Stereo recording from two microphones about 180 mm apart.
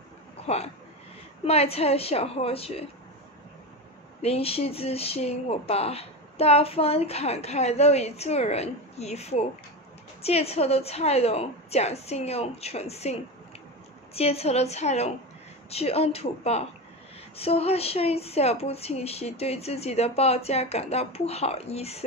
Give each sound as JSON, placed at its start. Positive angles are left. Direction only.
{"t": 1.4, "sound": "speech", "side_deg": 35}
{"t": 4.2, "sound": "speech", "side_deg": 35}